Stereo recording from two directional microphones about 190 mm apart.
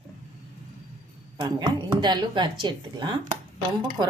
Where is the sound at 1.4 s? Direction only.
20° right (ahead or behind).